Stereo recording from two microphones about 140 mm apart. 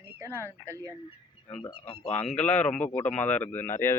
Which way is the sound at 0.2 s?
20° right (ahead or behind).